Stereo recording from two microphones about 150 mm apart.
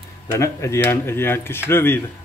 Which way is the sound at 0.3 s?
20° left (ahead or behind).